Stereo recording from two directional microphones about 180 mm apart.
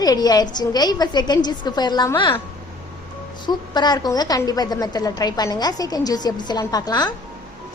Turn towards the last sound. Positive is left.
turn(degrees=20)  # may be behind; listen again after turning